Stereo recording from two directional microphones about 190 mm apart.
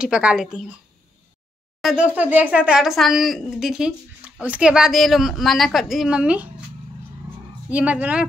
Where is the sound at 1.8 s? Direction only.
5° right (ahead or behind).